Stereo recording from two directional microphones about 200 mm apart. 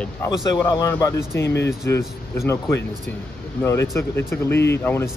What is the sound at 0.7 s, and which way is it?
Speech, 15° left (ahead or behind).